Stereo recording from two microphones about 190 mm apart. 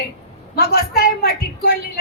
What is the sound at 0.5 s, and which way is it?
A woman's voice, 50° left (ahead or behind).